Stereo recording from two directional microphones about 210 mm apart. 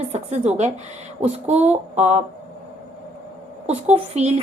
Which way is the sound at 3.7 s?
30° right (ahead or behind).